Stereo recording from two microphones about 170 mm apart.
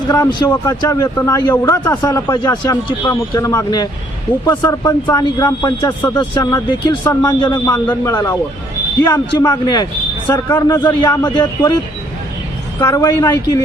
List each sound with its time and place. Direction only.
0.1 s a man's voice: 25° left (ahead or behind)
11.0 s a man's voice: 25° left (ahead or behind)
12.8 s a man's voice: 25° left (ahead or behind)